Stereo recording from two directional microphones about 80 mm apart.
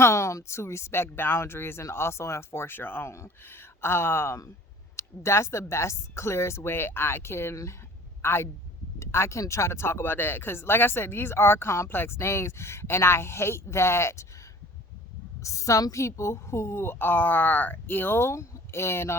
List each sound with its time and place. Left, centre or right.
0.0 s a man's voice: left
15.4 s speech: left